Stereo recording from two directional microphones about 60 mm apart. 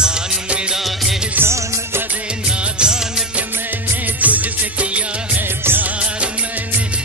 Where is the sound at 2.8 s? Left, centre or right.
Centre.